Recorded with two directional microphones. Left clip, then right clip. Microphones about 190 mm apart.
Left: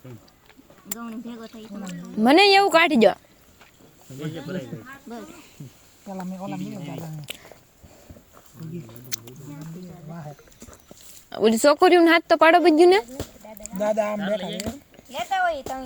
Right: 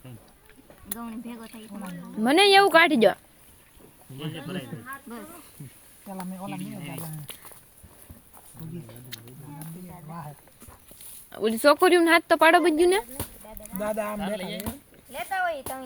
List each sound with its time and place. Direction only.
0.9 s speech: centre (ahead or behind)
1.9 s speech: 20° left (ahead or behind)
11.3 s speech: 30° left (ahead or behind)
13.7 s speech: 10° left (ahead or behind)
14.2 s speech: 40° right (ahead or behind)
14.6 s a sound: 25° left (ahead or behind)